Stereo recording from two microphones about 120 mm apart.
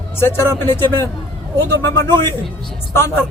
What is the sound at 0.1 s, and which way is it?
Speech, 20° left (ahead or behind).